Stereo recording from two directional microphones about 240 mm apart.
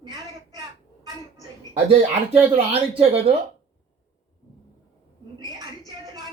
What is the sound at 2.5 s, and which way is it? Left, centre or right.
Speech, right.